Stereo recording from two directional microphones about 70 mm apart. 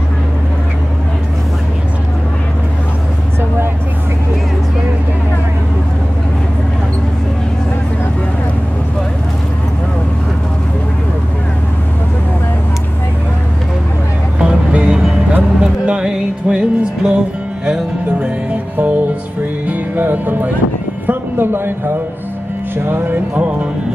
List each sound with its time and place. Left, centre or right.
14.4 s music: centre
21.1 s a sound: right
22.8 s speech: right